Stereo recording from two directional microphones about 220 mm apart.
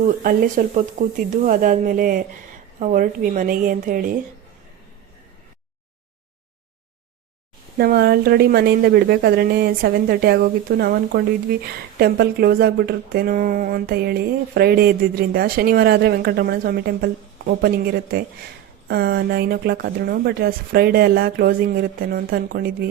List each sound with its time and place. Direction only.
0.2 s speech: 35° right (ahead or behind)
7.8 s speech: 45° right (ahead or behind)